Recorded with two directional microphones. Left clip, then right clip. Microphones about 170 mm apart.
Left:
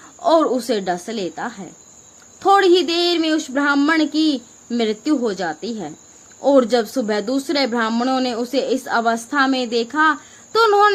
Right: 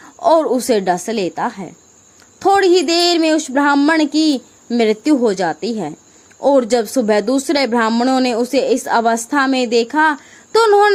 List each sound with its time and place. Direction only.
0.0 s speech: 40° right (ahead or behind)